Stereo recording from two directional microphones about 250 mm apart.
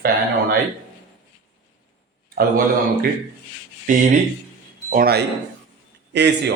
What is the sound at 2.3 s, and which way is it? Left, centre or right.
A man's voice, right.